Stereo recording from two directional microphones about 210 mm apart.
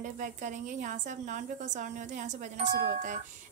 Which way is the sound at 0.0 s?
35° right (ahead or behind).